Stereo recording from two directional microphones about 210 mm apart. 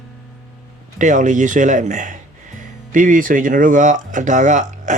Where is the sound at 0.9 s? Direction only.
35° right (ahead or behind).